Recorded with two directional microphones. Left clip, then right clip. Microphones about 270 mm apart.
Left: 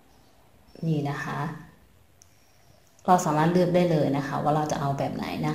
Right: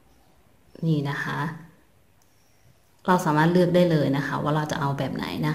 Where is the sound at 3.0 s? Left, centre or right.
Centre.